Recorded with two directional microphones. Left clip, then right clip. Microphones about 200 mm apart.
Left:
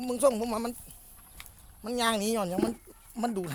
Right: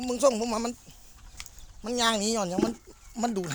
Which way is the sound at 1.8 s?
10° right (ahead or behind).